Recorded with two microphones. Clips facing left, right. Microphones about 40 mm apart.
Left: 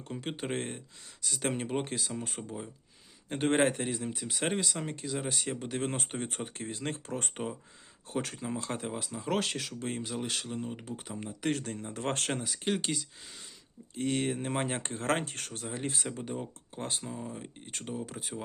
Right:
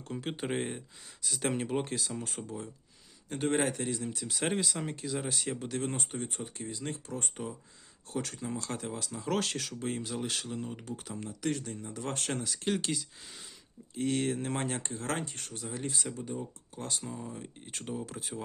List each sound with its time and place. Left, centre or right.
0.1 s speech: centre
3.2 s speech: left
4.3 s speech: centre
5.8 s speech: left
8.1 s speech: left
9.1 s speech: centre
11.4 s speech: left
12.4 s speech: centre
14.5 s speech: left
14.8 s speech: left
15.8 s speech: left
17.7 s speech: centre